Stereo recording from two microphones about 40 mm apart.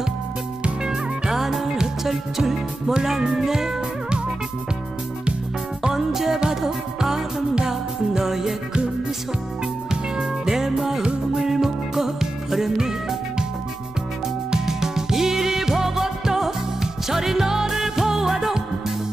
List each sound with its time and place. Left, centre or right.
0.8 s music: centre
1.4 s music: centre
2.9 s speech: centre
5.9 s music: centre
10.1 s music: centre
14.5 s music: centre